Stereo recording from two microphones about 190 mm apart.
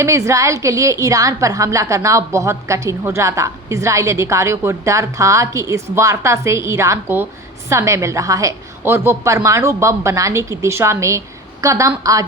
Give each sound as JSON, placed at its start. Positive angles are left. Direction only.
{"t": 0.0, "sound": "a woman's voice", "side_deg": -15}